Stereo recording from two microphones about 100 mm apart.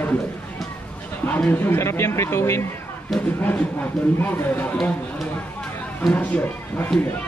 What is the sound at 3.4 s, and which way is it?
Speech, 15° left (ahead or behind).